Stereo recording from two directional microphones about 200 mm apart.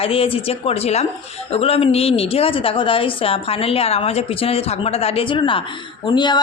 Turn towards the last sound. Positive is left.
turn(degrees=20)  # may be behind; listen again after turning